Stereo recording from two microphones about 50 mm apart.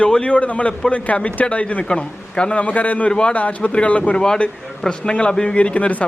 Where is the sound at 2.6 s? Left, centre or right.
Left.